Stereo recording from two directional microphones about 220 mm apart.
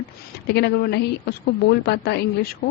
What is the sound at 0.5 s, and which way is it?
A woman's voice, 50° left (ahead or behind).